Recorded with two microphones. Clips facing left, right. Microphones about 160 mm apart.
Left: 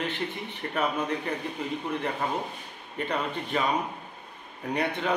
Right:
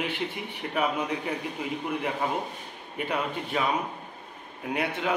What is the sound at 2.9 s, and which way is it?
Speech, 10° right (ahead or behind).